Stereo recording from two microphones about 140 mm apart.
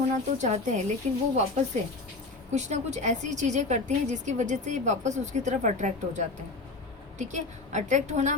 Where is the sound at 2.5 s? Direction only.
55° right (ahead or behind).